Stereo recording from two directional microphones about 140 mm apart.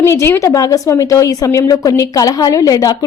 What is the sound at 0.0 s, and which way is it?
A woman's voice, 20° left (ahead or behind).